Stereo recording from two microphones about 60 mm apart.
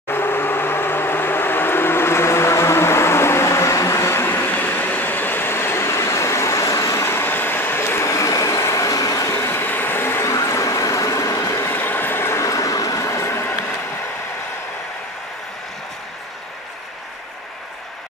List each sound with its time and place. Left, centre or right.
0.1 s vehicle: left
7.1 s vehicle: left
8.1 s train: left
9.3 s vehicle: left
10.2 s vehicle: left
11.7 s vehicle: left
12.4 s a sound: left